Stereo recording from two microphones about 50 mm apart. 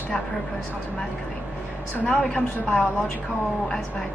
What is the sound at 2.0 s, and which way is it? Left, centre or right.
Speech, centre.